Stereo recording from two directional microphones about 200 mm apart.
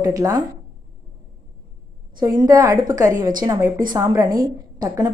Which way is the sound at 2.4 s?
20° right (ahead or behind).